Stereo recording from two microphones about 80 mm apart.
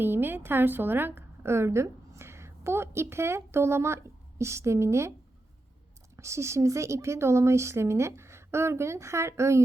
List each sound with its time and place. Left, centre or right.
0.0 s a woman's voice: right
6.1 s speech: right